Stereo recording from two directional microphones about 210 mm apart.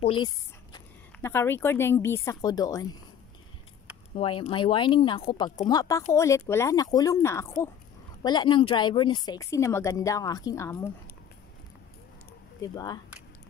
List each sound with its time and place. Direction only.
0.0 s speech: 25° left (ahead or behind)
0.7 s speech: 10° left (ahead or behind)
4.1 s speech: 25° left (ahead or behind)
12.5 s speech: 20° left (ahead or behind)